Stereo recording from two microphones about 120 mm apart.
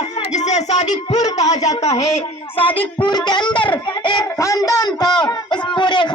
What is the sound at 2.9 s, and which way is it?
A man's voice, 35° left (ahead or behind).